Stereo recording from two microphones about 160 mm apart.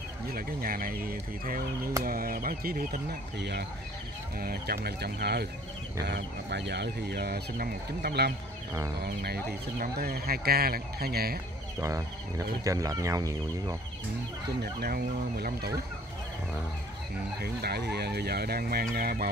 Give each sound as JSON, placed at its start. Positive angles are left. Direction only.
{"t": 0.3, "sound": "speech", "side_deg": -65}
{"t": 4.4, "sound": "speech", "side_deg": -70}
{"t": 4.8, "sound": "speech", "side_deg": -90}
{"t": 11.8, "sound": "speech", "side_deg": -20}
{"t": 14.6, "sound": "speech", "side_deg": -75}
{"t": 17.4, "sound": "speech", "side_deg": -85}